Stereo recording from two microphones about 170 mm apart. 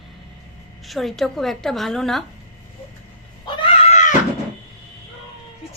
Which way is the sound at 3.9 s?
45° left (ahead or behind).